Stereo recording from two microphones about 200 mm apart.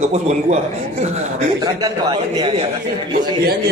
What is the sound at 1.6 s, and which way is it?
Speech, 20° right (ahead or behind).